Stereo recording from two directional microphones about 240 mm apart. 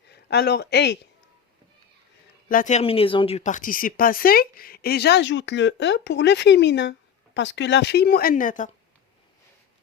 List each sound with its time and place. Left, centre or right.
0.1 s speech: left
2.5 s speech: left